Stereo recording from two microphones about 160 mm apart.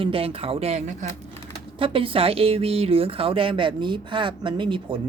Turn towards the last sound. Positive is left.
turn(degrees=-30)  # may be behind; listen again after turning